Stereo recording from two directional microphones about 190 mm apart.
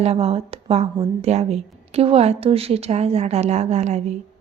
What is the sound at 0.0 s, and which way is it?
Speech, 30° right (ahead or behind).